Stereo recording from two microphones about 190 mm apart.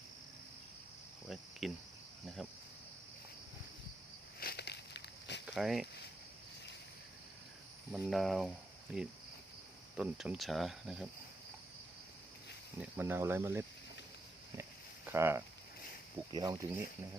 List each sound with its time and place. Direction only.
1.3 s speech: centre (ahead or behind)
4.4 s a sound: 55° left (ahead or behind)
5.5 s speech: centre (ahead or behind)
7.9 s speech: centre (ahead or behind)
12.8 s speech: 10° right (ahead or behind)
14.6 s a sound: 15° right (ahead or behind)
16.3 s speech: 20° right (ahead or behind)